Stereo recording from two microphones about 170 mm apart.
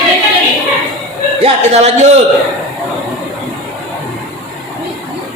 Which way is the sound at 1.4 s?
35° right (ahead or behind).